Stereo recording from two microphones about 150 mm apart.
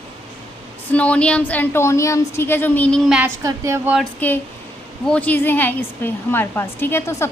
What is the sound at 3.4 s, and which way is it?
Speech, 20° right (ahead or behind).